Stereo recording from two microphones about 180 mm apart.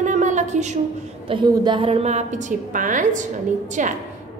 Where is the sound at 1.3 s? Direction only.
25° right (ahead or behind).